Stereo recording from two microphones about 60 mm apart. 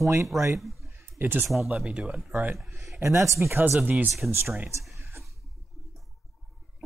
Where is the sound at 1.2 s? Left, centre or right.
Right.